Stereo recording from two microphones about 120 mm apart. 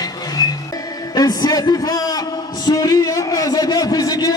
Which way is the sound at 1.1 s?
30° left (ahead or behind).